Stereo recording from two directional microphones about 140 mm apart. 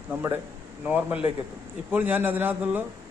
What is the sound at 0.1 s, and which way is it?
A man's voice, 15° right (ahead or behind).